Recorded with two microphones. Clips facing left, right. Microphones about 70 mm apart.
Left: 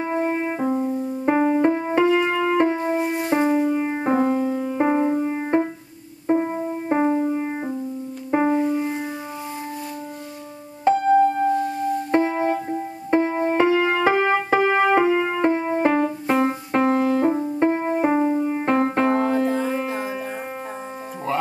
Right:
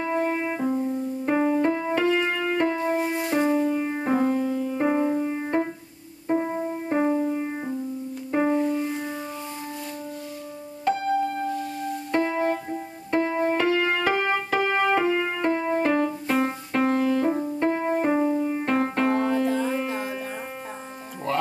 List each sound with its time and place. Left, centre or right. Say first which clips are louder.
0.0 s music: left 2 dB; left
10.9 s music: left 8 dB; left; by 20.2 s centre